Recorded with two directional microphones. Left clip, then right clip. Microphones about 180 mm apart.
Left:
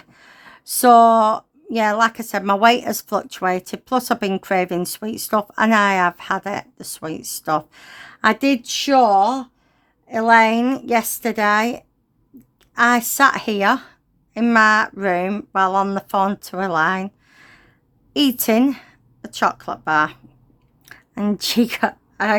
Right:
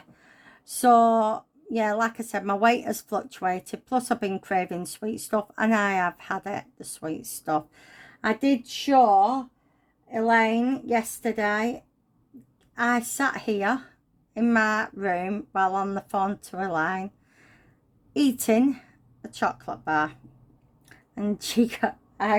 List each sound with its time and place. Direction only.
0.1 s a woman's voice: 30° left (ahead or behind)